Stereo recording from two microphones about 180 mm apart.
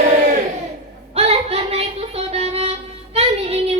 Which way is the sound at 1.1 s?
35° right (ahead or behind).